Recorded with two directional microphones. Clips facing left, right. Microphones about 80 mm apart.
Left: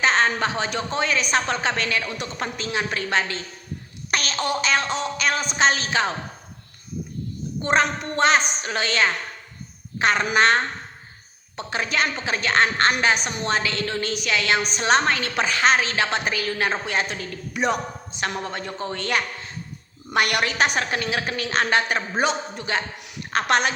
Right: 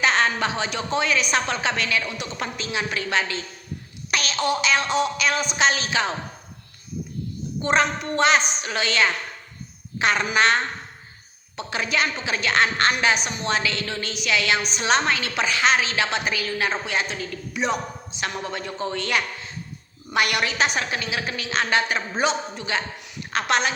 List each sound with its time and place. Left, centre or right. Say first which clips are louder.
0.0 s a woman's voice: left 1 dB; left
4.1 s a sound: even; left
4.6 s a woman's voice: right 2 dB; left
7.6 s a woman's voice: even; left
18.5 s a woman's voice: right 1 dB; left